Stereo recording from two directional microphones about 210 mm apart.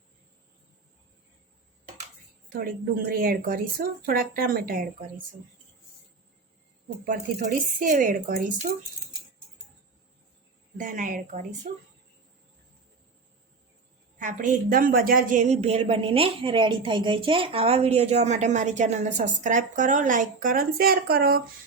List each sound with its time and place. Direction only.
2.5 s speech: 45° right (ahead or behind)
7.8 s a woman's voice: 40° right (ahead or behind)
10.8 s a woman's voice: 40° right (ahead or behind)
14.2 s a woman's voice: 40° right (ahead or behind)